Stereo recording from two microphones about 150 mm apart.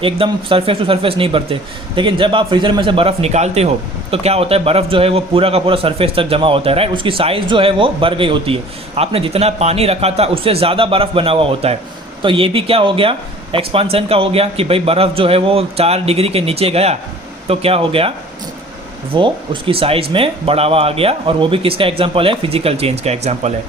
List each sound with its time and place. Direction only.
0.0 s a man's voice: 35° right (ahead or behind)
19.1 s a man's voice: 35° right (ahead or behind)